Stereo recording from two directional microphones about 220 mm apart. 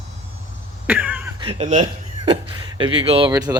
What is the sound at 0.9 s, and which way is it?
Cough, 5° right (ahead or behind).